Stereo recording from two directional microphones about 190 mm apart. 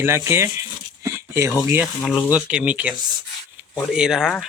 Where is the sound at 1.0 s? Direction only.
15° right (ahead or behind).